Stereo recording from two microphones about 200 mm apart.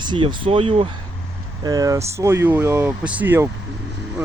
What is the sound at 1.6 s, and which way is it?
Speech, 15° right (ahead or behind).